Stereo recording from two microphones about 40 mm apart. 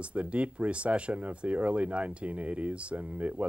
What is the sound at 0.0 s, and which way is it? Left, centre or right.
Speech, right.